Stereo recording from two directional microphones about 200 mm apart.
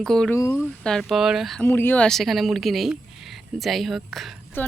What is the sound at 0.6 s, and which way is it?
Speech, centre (ahead or behind).